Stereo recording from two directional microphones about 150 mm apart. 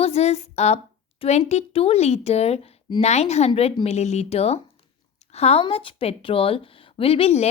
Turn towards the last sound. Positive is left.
turn(degrees=45)  # may be behind; listen again after turning